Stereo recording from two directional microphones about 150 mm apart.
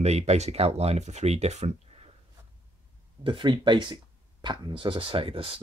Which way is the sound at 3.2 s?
35° right (ahead or behind).